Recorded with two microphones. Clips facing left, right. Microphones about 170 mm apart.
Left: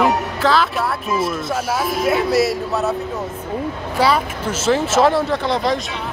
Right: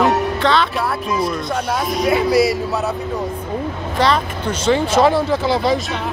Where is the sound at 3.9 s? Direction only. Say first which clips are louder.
Even; 10° left (ahead or behind).